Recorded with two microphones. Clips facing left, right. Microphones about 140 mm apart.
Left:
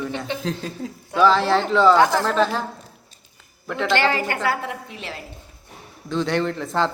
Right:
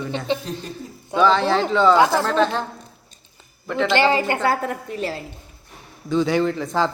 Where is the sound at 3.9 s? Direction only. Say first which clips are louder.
Right 3 dB; 20° right (ahead or behind).